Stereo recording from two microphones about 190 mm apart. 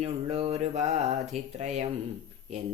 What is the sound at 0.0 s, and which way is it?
Speech, 35° right (ahead or behind).